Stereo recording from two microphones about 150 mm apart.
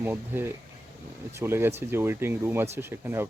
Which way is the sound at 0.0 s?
15° right (ahead or behind).